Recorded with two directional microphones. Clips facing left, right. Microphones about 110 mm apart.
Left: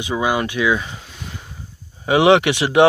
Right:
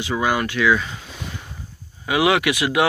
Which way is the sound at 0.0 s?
20° left (ahead or behind).